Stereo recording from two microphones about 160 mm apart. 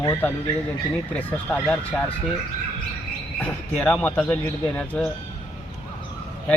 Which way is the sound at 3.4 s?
5° left (ahead or behind).